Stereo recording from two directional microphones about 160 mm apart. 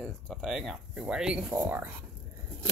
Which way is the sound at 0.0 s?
5° right (ahead or behind).